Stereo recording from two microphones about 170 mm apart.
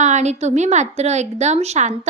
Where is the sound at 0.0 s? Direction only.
45° right (ahead or behind).